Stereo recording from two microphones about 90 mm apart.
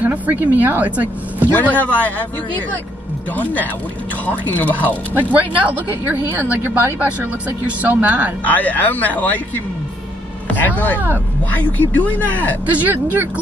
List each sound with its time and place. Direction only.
0.0 s a woman's voice: 20° right (ahead or behind)
1.5 s speech: 15° left (ahead or behind)
4.3 s speech: 20° left (ahead or behind)
5.3 s a woman's voice: 15° right (ahead or behind)
8.5 s speech: 20° left (ahead or behind)
11.8 s speech: 20° left (ahead or behind)
12.7 s a woman's voice: 20° right (ahead or behind)